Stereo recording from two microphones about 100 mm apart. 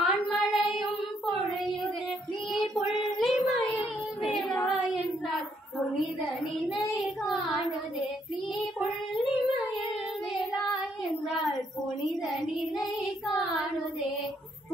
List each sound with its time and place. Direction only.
0.0 s child singing: 5° right (ahead or behind)
2.5 s child singing: centre (ahead or behind)
7.0 s child singing: centre (ahead or behind)
12.0 s child singing: centre (ahead or behind)